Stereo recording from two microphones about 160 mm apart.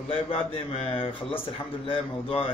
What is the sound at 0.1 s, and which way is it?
Speech, 35° left (ahead or behind).